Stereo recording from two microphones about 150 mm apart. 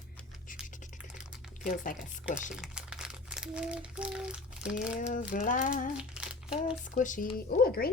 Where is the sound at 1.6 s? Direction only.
60° left (ahead or behind).